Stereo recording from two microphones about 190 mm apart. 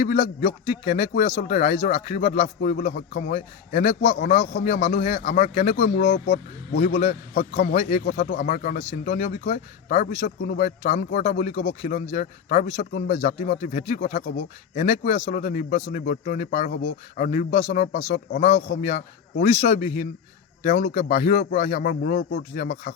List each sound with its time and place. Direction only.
0.0 s a man's voice: 40° left (ahead or behind)
10.2 s a man's voice: 50° left (ahead or behind)